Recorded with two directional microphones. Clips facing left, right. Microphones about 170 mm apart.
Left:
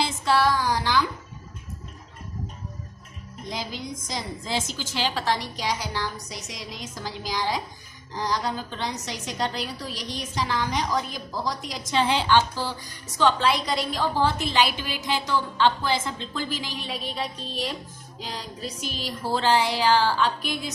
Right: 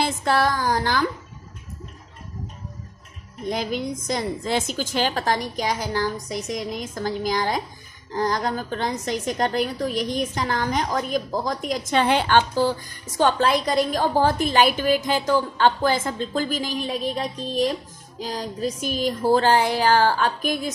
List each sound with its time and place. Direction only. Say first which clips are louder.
0.0 s a woman's voice: right 1 dB; 50° right (ahead or behind)
3.4 s a woman's voice: right 8 dB; 55° right (ahead or behind)